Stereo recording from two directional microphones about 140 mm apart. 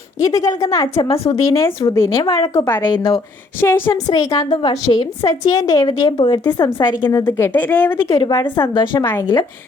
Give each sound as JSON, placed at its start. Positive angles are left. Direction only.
{"t": 0.2, "sound": "a woman's voice", "side_deg": 25}
{"t": 0.9, "sound": "speech", "side_deg": 45}
{"t": 1.3, "sound": "a woman's voice", "side_deg": 25}
{"t": 2.9, "sound": "a woman's voice", "side_deg": 35}
{"t": 3.6, "sound": "a woman's voice", "side_deg": 15}
{"t": 4.1, "sound": "a woman's voice", "side_deg": 30}
{"t": 6.0, "sound": "a woman's voice", "side_deg": 35}
{"t": 7.3, "sound": "a woman's voice", "side_deg": 15}
{"t": 8.1, "sound": "a woman's voice", "side_deg": 25}